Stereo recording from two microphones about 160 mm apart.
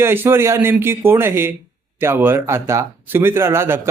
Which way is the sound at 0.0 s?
15° right (ahead or behind).